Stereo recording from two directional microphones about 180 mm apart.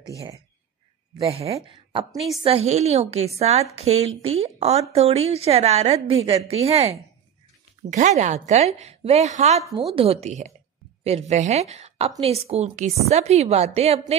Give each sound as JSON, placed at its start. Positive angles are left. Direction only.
{"t": 1.3, "sound": "a woman's voice", "side_deg": -35}